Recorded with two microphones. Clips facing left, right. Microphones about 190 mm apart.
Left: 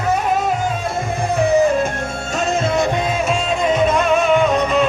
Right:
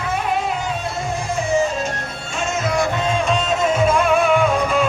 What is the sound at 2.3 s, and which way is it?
Music, 30° left (ahead or behind).